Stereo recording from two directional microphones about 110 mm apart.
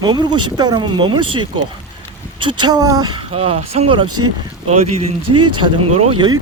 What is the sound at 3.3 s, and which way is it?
Speech, 65° right (ahead or behind).